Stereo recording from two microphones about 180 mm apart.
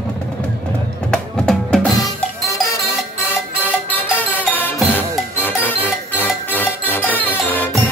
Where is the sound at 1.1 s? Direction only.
5° left (ahead or behind).